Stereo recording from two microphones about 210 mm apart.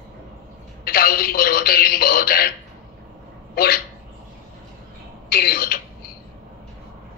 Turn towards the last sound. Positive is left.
turn(degrees=45)  # may be behind; listen again after turning